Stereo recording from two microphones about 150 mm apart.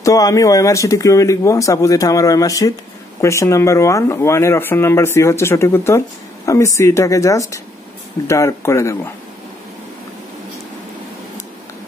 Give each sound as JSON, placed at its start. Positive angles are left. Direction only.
{"t": 0.0, "sound": "speech", "side_deg": 25}